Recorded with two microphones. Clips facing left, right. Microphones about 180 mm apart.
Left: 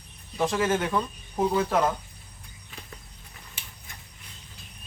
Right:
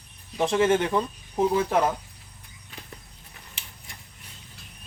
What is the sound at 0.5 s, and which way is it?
Speech, 25° right (ahead or behind).